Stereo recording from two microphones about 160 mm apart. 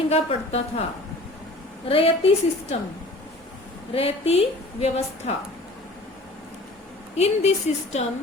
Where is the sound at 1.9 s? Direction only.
35° left (ahead or behind).